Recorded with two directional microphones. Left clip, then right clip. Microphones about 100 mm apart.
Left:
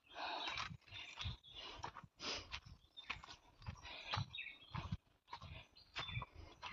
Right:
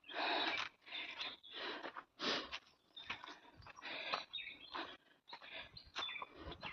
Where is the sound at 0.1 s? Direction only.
65° right (ahead or behind).